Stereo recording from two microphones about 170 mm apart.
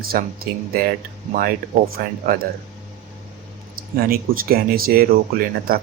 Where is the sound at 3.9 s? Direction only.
60° right (ahead or behind).